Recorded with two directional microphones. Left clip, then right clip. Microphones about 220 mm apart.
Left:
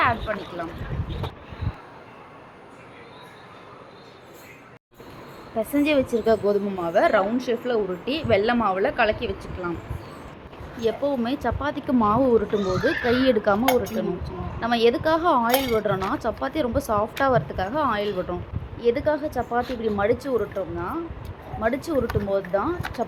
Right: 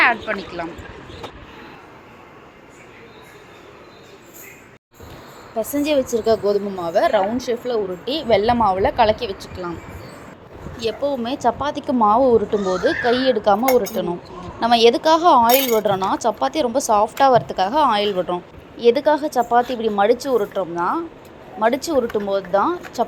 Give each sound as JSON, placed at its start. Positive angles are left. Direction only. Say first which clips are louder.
{"t": 0.3, "sound": "speech", "louder": "right 4 dB", "side_deg": -5}
{"t": 5.5, "sound": "a woman's voice", "louder": "right 2 dB", "side_deg": -15}
{"t": 10.8, "sound": "speech", "louder": "right 2 dB", "side_deg": -20}
{"t": 11.1, "sound": "a woman's voice", "louder": "right 5 dB", "side_deg": -10}
{"t": 20.7, "sound": "a woman's voice", "louder": "right 8 dB", "side_deg": -15}